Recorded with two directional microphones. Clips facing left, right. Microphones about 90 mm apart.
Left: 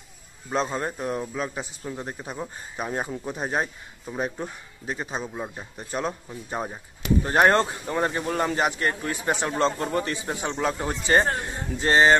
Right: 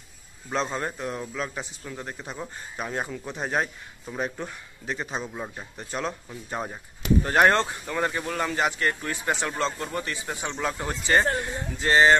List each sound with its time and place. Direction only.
0.5 s a man's voice: 10° left (ahead or behind)
7.8 s speech: 30° left (ahead or behind)
10.2 s speech: 30° left (ahead or behind)